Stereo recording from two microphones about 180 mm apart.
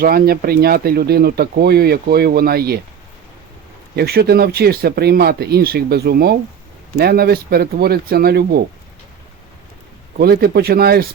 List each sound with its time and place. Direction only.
0.0 s speech: 60° right (ahead or behind)
3.9 s speech: 60° right (ahead or behind)
10.2 s speech: 60° right (ahead or behind)